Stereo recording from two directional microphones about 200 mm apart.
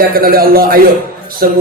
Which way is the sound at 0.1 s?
45° right (ahead or behind).